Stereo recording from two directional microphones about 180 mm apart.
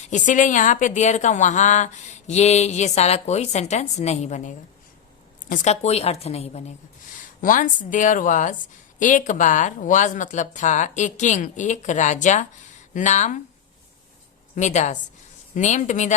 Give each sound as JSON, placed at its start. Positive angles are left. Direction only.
{"t": 0.1, "sound": "a woman's voice", "side_deg": 45}
{"t": 7.4, "sound": "a woman's voice", "side_deg": 45}
{"t": 14.5, "sound": "a woman's voice", "side_deg": 40}